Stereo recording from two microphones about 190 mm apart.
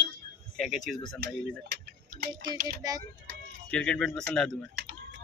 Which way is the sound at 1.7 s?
55° right (ahead or behind).